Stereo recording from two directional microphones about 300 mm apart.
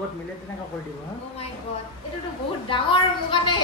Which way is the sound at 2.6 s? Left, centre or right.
Centre.